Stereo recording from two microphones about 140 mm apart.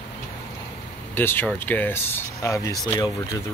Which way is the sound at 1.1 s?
15° left (ahead or behind).